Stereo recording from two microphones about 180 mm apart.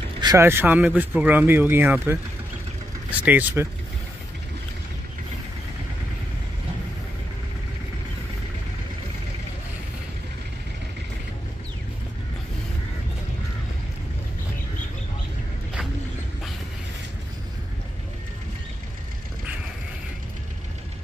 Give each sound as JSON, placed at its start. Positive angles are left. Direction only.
{"t": 0.2, "sound": "speech", "side_deg": -15}